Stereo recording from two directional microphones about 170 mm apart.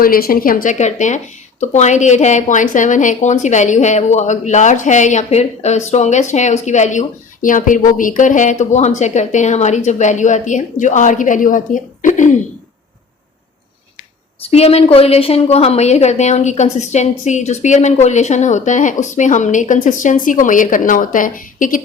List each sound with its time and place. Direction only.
0.0 s a woman's voice: 60° left (ahead or behind)
14.4 s a woman's voice: 35° left (ahead or behind); by 21.8 s 55° left (ahead or behind)